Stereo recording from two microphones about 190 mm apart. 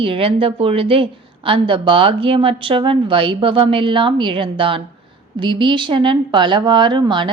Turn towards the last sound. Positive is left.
turn(degrees=-25)  # may be behind; listen again after turning